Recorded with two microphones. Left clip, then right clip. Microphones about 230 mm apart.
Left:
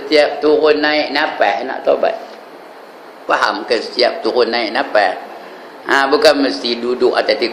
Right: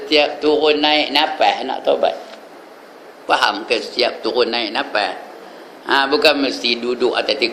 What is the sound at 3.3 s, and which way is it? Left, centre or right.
A man's voice, centre.